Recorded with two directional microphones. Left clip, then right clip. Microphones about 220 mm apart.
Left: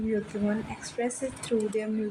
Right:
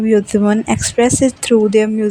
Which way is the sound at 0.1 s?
50° right (ahead or behind).